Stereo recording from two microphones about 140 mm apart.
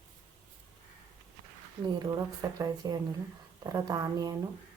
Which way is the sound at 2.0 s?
25° right (ahead or behind).